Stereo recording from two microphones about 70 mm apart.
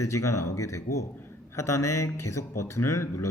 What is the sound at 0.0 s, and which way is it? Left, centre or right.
Speech, left.